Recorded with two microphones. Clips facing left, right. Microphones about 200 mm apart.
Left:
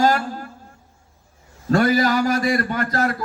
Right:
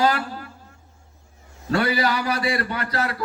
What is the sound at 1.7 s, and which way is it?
Speech, 45° left (ahead or behind).